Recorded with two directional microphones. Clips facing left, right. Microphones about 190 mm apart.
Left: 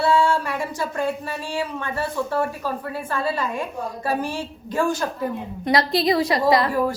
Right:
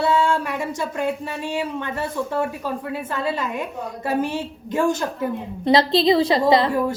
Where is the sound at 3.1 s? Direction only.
20° right (ahead or behind).